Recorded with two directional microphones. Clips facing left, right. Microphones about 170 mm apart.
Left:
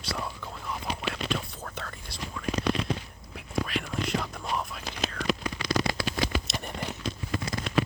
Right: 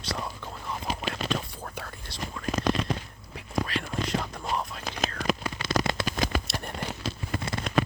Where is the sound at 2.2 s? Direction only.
45° right (ahead or behind).